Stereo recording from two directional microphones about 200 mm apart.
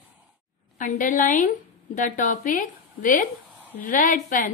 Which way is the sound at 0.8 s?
40° left (ahead or behind).